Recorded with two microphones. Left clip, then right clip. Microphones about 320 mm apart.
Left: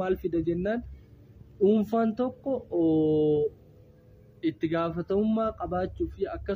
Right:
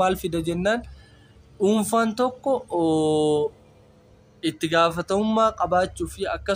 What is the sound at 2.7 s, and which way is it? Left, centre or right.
Speech, centre.